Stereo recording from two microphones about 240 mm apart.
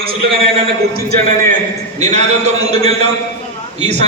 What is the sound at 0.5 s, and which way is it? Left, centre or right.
Speech, right.